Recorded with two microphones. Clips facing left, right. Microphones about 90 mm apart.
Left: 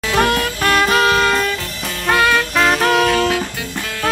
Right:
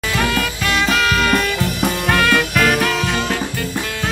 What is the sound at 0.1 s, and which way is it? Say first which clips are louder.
Music: left 4 dB; 55° left (ahead or behind).